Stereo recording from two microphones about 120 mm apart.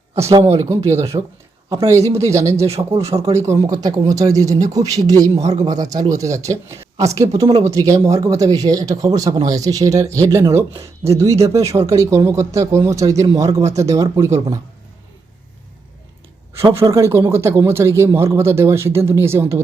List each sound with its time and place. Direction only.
0.4 s speech: 25° right (ahead or behind)
1.1 s speech: 40° right (ahead or behind)
1.7 s speech: 25° right (ahead or behind)
2.6 s speech: 60° right (ahead or behind)
3.3 s speech: 25° right (ahead or behind)
3.7 s speech: 35° right (ahead or behind)
5.3 s speech: 65° right (ahead or behind)
5.6 s speech: 30° right (ahead or behind)
16.6 s speech: 25° right (ahead or behind)